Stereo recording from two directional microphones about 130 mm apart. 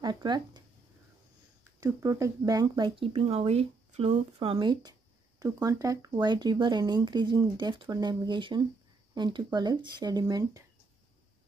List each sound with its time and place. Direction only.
0.0 s speech: 35° right (ahead or behind)
2.0 s speech: 25° right (ahead or behind)